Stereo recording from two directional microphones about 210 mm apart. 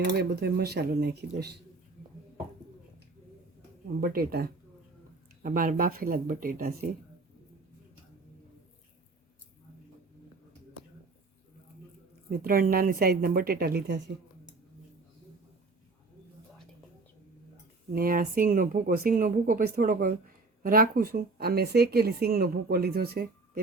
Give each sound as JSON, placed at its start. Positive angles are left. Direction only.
{"t": 0.1, "sound": "speech", "side_deg": -55}
{"t": 4.0, "sound": "speech", "side_deg": -45}
{"t": 12.4, "sound": "speech", "side_deg": -45}
{"t": 17.9, "sound": "speech", "side_deg": -45}